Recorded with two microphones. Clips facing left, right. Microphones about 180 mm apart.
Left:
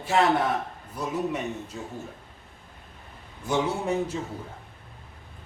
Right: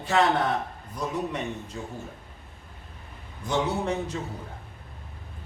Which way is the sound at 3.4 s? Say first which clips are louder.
Even; 10° left (ahead or behind).